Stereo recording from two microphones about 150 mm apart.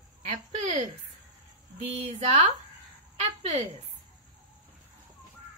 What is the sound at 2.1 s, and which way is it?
A woman's voice, 45° right (ahead or behind).